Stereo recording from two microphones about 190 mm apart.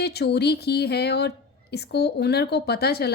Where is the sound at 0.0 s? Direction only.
60° left (ahead or behind).